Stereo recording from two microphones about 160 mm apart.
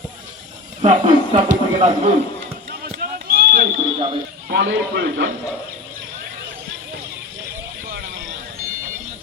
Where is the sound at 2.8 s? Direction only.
70° right (ahead or behind).